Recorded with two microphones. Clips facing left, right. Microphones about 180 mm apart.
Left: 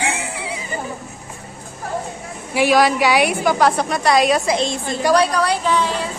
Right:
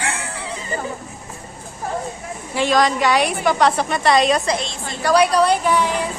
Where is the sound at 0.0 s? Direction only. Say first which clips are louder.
Left 3 dB; 15° left (ahead or behind).